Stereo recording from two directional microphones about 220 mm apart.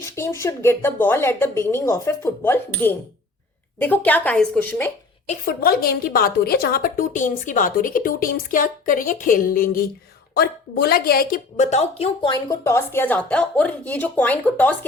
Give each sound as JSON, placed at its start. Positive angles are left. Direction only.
{"t": 0.0, "sound": "a woman's voice", "side_deg": 10}
{"t": 5.3, "sound": "a woman's voice", "side_deg": 40}